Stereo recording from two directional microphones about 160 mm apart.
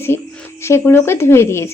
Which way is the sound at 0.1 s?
15° left (ahead or behind).